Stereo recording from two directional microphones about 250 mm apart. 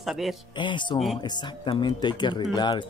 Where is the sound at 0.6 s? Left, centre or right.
Centre.